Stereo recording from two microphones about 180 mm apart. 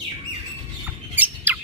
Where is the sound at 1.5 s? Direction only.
10° right (ahead or behind).